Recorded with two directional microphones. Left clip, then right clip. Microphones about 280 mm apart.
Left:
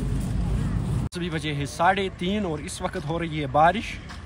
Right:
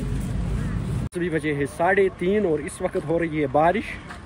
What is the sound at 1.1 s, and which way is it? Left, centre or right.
Speech, centre.